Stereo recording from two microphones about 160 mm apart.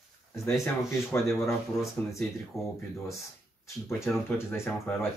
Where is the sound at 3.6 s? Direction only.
15° left (ahead or behind).